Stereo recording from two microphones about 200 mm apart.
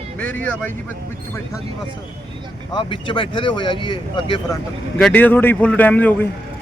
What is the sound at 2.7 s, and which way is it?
Speech, 25° left (ahead or behind).